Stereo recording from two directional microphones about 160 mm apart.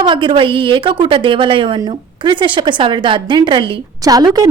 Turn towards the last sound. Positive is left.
turn(degrees=-25)  # may be behind; listen again after turning